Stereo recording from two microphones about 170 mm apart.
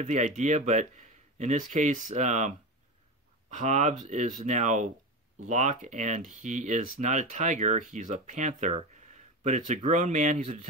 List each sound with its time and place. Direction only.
0.0 s speech: 45° right (ahead or behind)